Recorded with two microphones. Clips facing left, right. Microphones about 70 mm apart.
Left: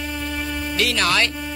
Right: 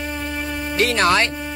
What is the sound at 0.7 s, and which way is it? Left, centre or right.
Music, right.